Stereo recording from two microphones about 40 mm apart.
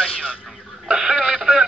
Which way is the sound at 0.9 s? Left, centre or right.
Centre.